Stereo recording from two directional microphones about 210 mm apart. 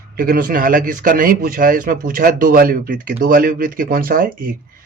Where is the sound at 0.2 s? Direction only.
45° right (ahead or behind).